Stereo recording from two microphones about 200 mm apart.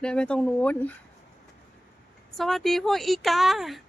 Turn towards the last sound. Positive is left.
turn(degrees=0)  # may be behind; listen again after turning